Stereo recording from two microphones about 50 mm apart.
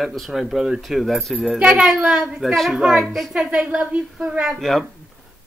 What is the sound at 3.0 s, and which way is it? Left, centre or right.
Speech, centre.